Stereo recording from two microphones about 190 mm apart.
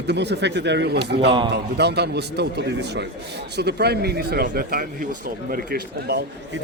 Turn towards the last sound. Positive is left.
turn(degrees=-60)  # may be behind; listen again after turning